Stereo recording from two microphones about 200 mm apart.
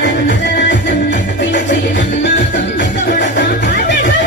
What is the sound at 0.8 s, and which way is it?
Music, 45° left (ahead or behind).